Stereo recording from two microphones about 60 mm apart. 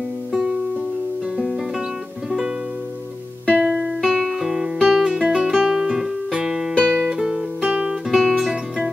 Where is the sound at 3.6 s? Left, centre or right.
Centre.